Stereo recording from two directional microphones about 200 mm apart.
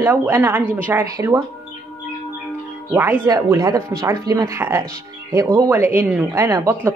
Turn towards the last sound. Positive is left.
turn(degrees=-15)  # may be behind; listen again after turning